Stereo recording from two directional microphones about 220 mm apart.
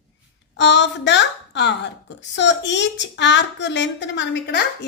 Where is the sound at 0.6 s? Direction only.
55° left (ahead or behind).